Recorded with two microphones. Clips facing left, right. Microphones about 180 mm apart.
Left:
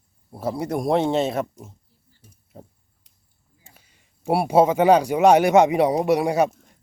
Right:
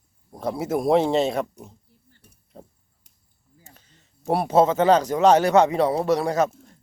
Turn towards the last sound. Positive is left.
turn(degrees=15)  # may be behind; listen again after turning